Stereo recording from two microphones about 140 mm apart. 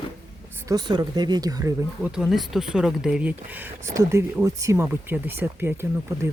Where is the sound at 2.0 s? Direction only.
5° right (ahead or behind).